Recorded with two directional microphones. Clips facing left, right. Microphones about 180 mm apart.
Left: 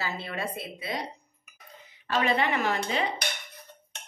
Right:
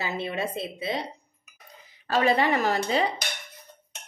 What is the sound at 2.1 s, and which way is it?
Speech, 35° right (ahead or behind).